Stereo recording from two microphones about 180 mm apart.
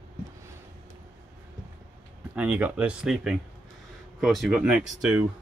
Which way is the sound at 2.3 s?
5° right (ahead or behind).